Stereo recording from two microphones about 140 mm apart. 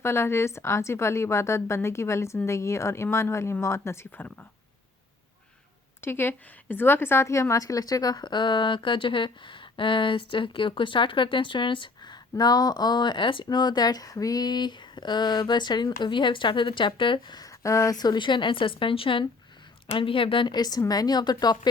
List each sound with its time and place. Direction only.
0.0 s a woman's voice: 20° left (ahead or behind)
6.0 s a woman's voice: 15° left (ahead or behind)